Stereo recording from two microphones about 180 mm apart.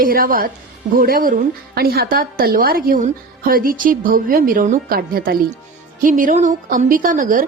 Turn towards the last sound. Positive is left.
turn(degrees=-50)  # may be behind; listen again after turning